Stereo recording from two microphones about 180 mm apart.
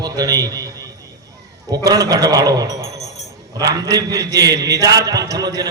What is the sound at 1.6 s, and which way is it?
A man's voice, 20° right (ahead or behind).